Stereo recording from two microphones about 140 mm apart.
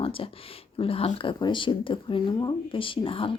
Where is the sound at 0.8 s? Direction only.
40° left (ahead or behind).